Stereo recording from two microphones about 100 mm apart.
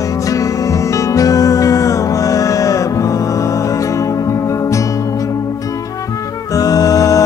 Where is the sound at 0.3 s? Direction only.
35° left (ahead or behind).